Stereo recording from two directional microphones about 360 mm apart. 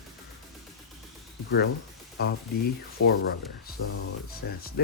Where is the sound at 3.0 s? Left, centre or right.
Left.